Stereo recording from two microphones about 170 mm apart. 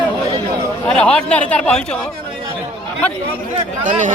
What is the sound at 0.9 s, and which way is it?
Speech, 5° left (ahead or behind).